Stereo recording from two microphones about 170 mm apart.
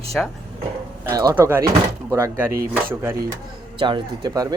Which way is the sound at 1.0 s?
20° right (ahead or behind).